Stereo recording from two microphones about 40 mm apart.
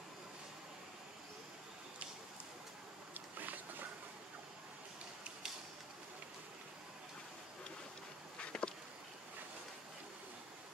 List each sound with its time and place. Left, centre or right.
3.3 s boat: right
8.5 s insect: left